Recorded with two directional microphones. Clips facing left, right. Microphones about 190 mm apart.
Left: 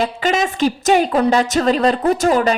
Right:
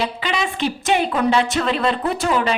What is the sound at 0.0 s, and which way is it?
Speech, 45° left (ahead or behind).